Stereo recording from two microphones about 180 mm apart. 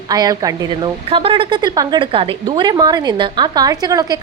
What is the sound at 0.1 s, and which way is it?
Speech, 20° right (ahead or behind).